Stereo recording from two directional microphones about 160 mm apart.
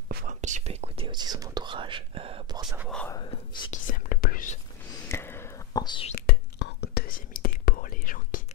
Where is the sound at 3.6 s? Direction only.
60° left (ahead or behind).